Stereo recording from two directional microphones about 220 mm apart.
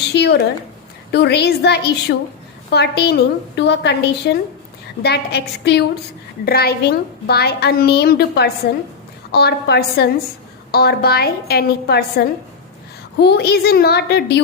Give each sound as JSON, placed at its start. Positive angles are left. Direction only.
{"t": 0.1, "sound": "a woman's voice", "side_deg": 50}